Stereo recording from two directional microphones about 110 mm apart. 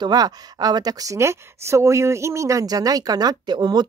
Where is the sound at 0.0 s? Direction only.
35° right (ahead or behind).